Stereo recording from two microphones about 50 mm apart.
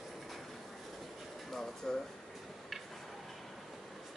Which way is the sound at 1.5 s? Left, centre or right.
Centre.